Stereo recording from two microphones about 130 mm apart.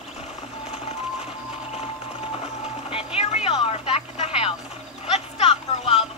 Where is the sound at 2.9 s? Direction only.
50° left (ahead or behind).